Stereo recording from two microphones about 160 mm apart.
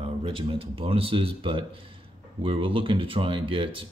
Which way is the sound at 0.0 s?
35° right (ahead or behind).